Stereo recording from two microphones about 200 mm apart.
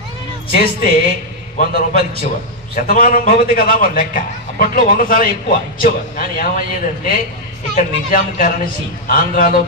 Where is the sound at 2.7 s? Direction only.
45° left (ahead or behind).